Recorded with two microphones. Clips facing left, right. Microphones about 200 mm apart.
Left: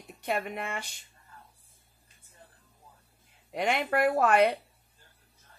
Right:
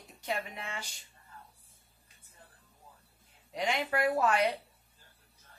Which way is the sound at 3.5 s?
55° left (ahead or behind).